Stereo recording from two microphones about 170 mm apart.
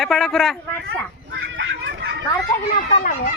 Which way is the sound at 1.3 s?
90° right.